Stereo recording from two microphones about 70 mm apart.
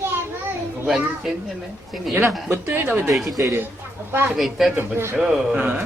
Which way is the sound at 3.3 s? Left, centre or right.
Right.